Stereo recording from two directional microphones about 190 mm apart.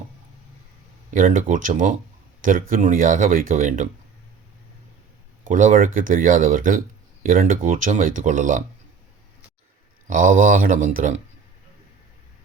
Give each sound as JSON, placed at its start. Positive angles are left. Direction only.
{"t": 1.1, "sound": "speech", "side_deg": -45}
{"t": 5.5, "sound": "speech", "side_deg": -40}
{"t": 10.1, "sound": "speech", "side_deg": -45}